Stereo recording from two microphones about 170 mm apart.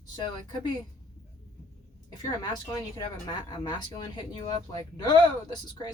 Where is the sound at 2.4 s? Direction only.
20° left (ahead or behind).